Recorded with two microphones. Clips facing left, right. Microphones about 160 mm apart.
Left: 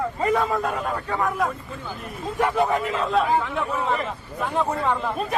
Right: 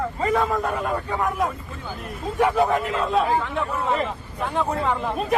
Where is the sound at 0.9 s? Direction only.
10° right (ahead or behind).